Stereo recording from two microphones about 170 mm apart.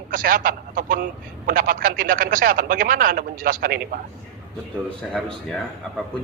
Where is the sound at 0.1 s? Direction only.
55° right (ahead or behind).